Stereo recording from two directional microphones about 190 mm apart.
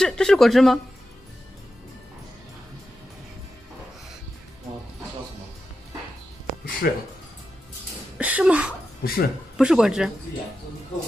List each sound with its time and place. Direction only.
0.0 s speech: 5° left (ahead or behind)
6.8 s speech: 55° left (ahead or behind)
8.2 s a sound: 5° right (ahead or behind)
9.0 s speech: 50° left (ahead or behind)
9.6 s speech: 5° right (ahead or behind)